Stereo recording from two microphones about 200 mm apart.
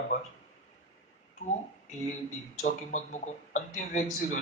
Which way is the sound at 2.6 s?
40° left (ahead or behind).